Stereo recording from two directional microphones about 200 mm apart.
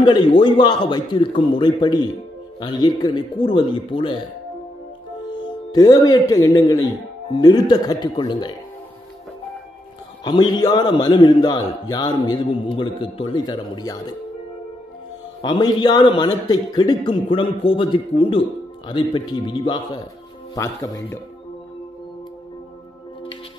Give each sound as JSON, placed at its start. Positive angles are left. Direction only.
{"t": 0.0, "sound": "a man's voice", "side_deg": 25}
{"t": 5.7, "sound": "a man's voice", "side_deg": 20}
{"t": 10.2, "sound": "a man's voice", "side_deg": 20}
{"t": 15.4, "sound": "a man's voice", "side_deg": 20}